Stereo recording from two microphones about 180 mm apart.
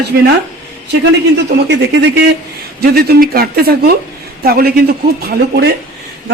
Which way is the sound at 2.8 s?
60° right (ahead or behind).